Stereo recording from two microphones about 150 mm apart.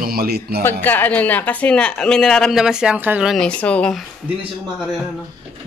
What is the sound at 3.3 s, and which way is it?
Speech, 5° left (ahead or behind).